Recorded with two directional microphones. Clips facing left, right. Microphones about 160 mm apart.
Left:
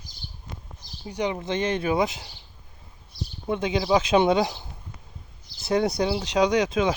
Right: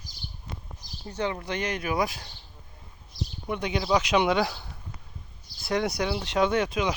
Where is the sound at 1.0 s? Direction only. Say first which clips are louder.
Left 3 dB; 15° left (ahead or behind).